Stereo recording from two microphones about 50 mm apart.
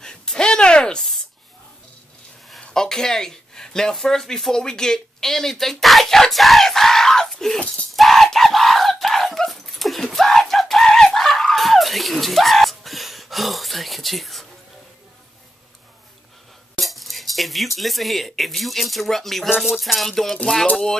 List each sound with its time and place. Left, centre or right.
0.0 s a sound: centre
2.7 s speech: centre
7.9 s a sound: centre
9.5 s dog: centre
16.8 s speech: centre
19.7 s music: centre